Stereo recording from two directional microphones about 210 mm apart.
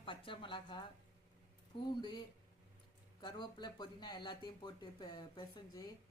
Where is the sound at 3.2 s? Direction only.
20° left (ahead or behind).